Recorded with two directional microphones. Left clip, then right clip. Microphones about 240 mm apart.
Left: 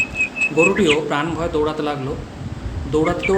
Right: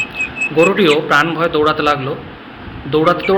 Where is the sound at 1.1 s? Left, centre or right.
Centre.